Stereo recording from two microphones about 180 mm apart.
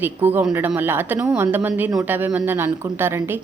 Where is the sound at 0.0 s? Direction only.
10° right (ahead or behind).